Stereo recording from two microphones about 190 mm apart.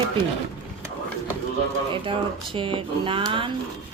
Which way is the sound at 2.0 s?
25° right (ahead or behind).